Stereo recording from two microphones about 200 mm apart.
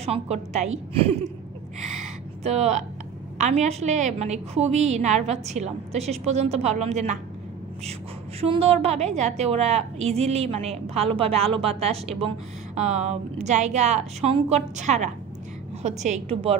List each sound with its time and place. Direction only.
0.0 s a woman's voice: 30° right (ahead or behind)
2.4 s a woman's voice: 35° right (ahead or behind)
8.4 s a woman's voice: 30° right (ahead or behind)